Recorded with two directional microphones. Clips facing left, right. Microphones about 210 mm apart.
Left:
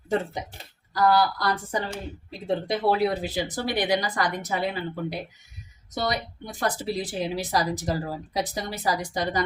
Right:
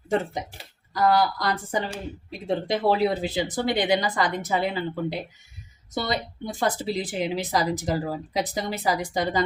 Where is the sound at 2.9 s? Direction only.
25° right (ahead or behind).